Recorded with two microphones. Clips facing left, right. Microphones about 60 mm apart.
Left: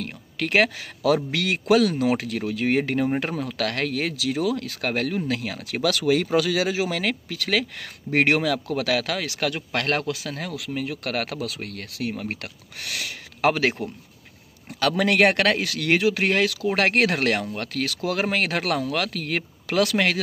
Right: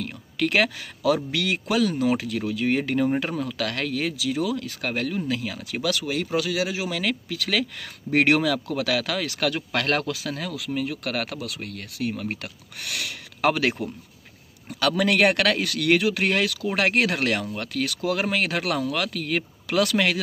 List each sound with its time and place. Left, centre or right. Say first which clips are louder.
0.0 s a man's voice: right 3 dB; left
6.8 s speech: left 2 dB; left
11.3 s speech: left 2 dB; left
12.8 s a man's voice: even; left